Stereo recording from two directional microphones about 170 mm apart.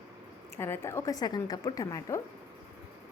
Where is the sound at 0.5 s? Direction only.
15° left (ahead or behind).